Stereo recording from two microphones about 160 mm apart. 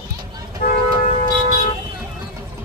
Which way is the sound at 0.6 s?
70° left (ahead or behind).